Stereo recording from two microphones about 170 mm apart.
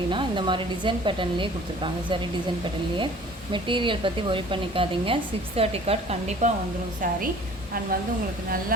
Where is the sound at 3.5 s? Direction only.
30° right (ahead or behind).